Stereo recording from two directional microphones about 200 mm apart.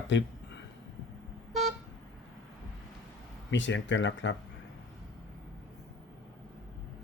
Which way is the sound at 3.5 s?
65° left (ahead or behind).